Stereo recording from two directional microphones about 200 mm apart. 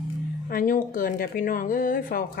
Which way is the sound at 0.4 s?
45° left (ahead or behind).